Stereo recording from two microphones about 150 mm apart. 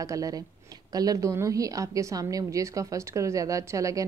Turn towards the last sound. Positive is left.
turn(degrees=-20)  # may be behind; listen again after turning